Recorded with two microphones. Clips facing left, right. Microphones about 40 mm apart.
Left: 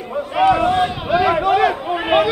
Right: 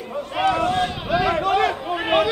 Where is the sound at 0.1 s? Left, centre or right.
Centre.